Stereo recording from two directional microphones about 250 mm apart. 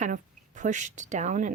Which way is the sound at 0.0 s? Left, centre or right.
Right.